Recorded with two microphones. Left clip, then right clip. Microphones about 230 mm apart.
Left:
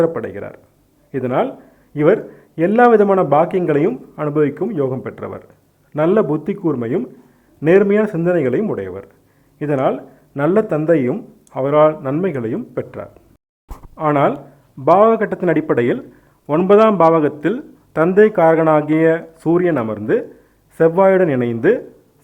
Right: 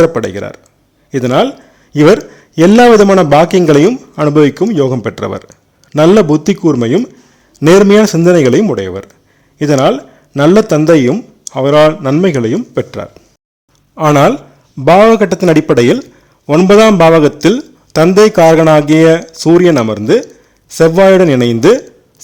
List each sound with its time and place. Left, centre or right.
0.0 s a man's voice: right